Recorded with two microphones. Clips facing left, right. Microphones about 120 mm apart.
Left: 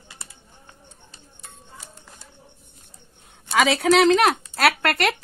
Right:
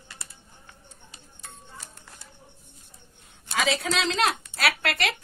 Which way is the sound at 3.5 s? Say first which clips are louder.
Left 8 dB; 70° left (ahead or behind).